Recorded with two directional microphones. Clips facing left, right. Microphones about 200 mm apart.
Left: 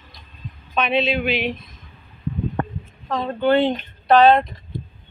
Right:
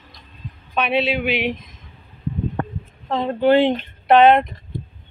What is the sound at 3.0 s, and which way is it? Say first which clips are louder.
Speech: right 3 dB; 25° right (ahead or behind).